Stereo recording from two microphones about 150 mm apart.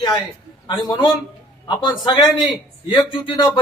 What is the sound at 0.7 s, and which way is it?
Speech, 30° left (ahead or behind).